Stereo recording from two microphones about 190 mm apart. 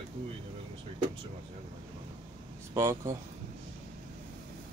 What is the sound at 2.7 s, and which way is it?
Speech, 15° right (ahead or behind).